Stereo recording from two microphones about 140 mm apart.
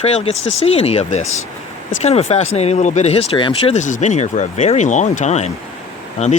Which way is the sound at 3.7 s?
60° left (ahead or behind).